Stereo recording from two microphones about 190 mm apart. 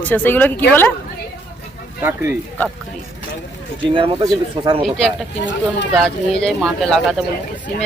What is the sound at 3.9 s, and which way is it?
Speech, 25° right (ahead or behind).